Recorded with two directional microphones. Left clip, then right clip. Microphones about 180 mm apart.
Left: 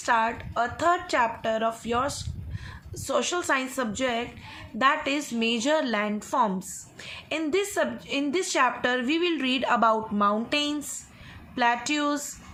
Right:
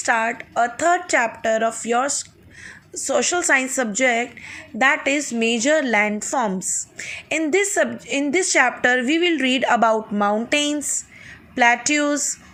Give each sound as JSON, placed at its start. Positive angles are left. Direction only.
{"t": 0.0, "sound": "a woman's voice", "side_deg": -20}